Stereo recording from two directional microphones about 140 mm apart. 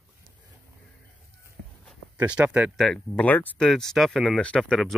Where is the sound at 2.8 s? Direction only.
10° left (ahead or behind).